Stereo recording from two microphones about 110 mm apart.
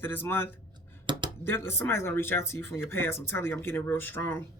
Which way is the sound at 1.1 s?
45° right (ahead or behind).